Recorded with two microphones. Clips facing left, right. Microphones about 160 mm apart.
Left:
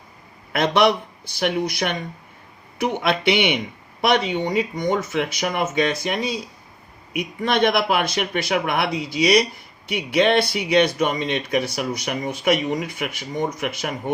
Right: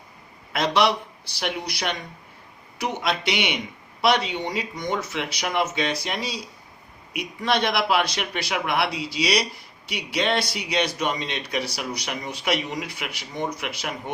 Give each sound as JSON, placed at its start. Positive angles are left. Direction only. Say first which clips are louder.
{"t": 0.5, "sound": "speech", "louder": "left 4 dB", "side_deg": 55}